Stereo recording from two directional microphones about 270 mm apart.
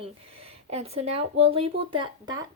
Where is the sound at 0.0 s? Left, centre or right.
Right.